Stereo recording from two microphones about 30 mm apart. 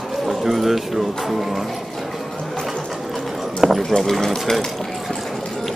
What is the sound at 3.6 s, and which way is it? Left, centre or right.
Speech, right.